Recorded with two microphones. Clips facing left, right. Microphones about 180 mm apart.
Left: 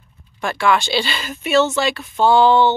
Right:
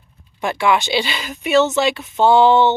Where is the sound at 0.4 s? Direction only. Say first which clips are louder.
Right 1 dB; 20° right (ahead or behind).